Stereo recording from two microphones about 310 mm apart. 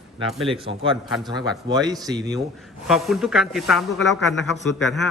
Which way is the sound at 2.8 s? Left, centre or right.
Centre.